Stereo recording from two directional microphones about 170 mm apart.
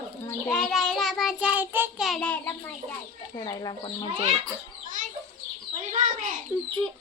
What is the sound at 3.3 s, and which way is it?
Speech, 25° left (ahead or behind).